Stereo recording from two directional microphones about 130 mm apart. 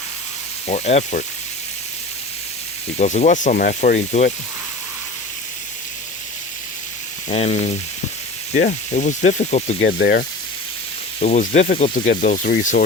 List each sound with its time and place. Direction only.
0.7 s frying: 60° left (ahead or behind)
3.0 s speech: 65° left (ahead or behind)
7.3 s frying: 55° left (ahead or behind)
8.5 s speech: 70° left (ahead or behind)
11.2 s speech: 70° left (ahead or behind); by 12.7 s 90° left